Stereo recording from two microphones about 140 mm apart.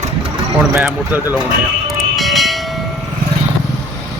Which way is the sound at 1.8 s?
Centre (ahead or behind).